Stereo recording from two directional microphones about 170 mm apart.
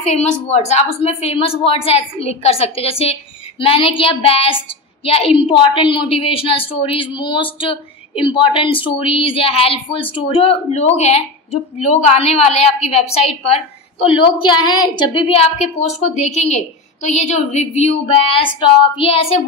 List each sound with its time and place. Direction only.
0.0 s a woman's voice: 40° left (ahead or behind)